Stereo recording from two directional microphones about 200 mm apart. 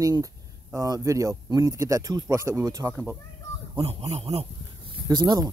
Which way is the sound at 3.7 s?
30° right (ahead or behind).